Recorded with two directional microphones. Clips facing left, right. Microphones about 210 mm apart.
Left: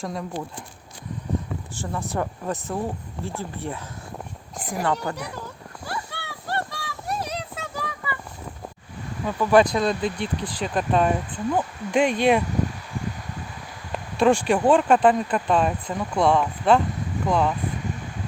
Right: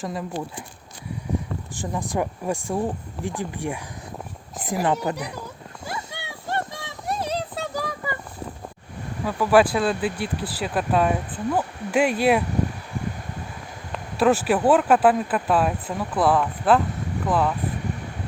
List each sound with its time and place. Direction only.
0.0 s speech: 5° right (ahead or behind)
1.7 s speech: 15° right (ahead or behind)
6.0 s child singing: 20° right (ahead or behind); by 8.2 s 40° right (ahead or behind)
9.2 s speech: 5° right (ahead or behind)
14.2 s speech: 5° right (ahead or behind)